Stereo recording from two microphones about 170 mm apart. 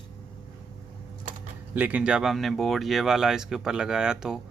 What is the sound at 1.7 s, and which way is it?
Speech, 10° right (ahead or behind).